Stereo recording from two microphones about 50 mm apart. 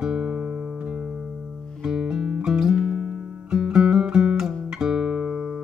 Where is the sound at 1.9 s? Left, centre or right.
Centre.